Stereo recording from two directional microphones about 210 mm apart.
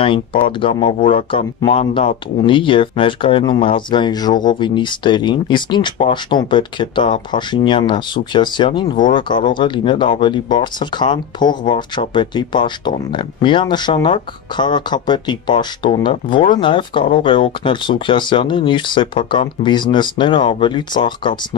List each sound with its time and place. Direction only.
0.0 s speech: 25° left (ahead or behind)